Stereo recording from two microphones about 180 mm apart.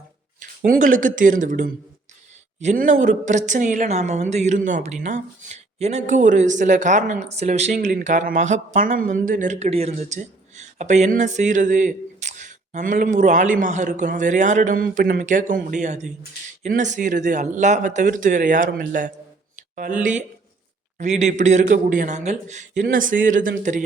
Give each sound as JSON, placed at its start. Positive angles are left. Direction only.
{"t": 0.3, "sound": "a woman's voice", "side_deg": -50}